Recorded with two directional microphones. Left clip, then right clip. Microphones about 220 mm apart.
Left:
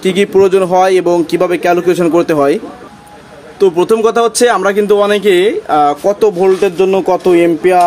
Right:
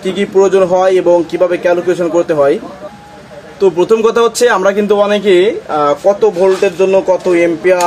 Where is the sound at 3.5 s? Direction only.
35° left (ahead or behind).